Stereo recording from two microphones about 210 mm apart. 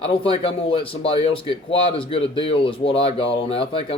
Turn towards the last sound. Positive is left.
turn(degrees=25)  # may be behind; listen again after turning